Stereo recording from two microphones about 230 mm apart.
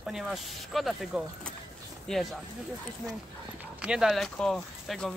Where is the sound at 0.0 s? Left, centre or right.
Centre.